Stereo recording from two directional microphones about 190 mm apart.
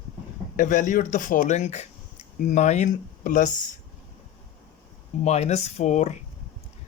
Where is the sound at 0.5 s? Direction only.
40° left (ahead or behind).